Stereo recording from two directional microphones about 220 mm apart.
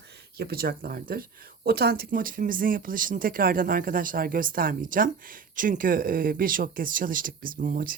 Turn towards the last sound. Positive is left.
turn(degrees=-40)  # may be behind; listen again after turning